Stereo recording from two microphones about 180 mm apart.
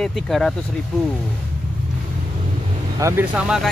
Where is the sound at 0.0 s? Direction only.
Centre (ahead or behind).